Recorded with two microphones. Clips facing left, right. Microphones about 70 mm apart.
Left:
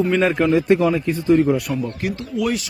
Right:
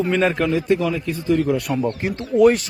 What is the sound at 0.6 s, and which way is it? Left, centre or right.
Speech, left.